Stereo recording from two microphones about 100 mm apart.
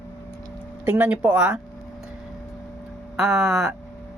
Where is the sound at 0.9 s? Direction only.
15° right (ahead or behind).